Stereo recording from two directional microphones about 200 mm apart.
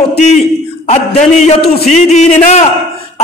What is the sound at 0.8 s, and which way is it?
A man's voice, 35° left (ahead or behind).